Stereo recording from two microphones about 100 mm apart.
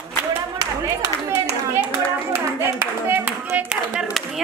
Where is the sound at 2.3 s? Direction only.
20° right (ahead or behind).